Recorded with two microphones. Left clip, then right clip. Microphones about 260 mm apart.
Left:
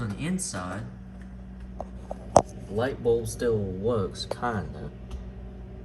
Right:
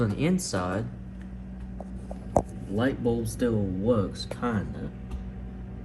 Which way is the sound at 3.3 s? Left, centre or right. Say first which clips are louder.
Left 1 dB; left.